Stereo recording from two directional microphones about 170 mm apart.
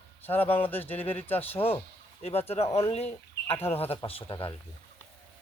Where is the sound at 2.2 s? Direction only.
35° left (ahead or behind).